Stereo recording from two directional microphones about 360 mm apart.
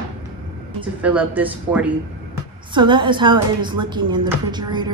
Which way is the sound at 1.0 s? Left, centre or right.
Centre.